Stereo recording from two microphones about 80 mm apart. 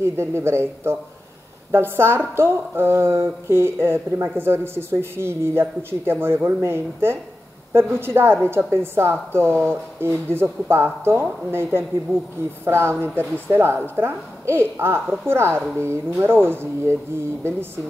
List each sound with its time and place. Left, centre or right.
0.0 s a woman's voice: right